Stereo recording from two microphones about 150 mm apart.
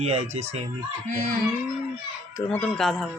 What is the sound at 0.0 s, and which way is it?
Speech, 45° right (ahead or behind).